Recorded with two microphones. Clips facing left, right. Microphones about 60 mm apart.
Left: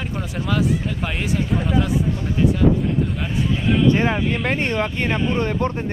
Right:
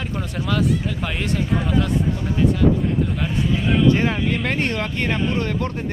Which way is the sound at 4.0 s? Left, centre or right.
Centre.